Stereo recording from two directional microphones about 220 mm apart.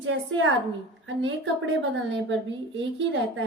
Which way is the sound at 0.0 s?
60° right (ahead or behind).